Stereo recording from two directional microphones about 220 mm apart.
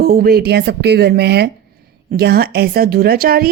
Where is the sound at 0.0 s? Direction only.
45° right (ahead or behind).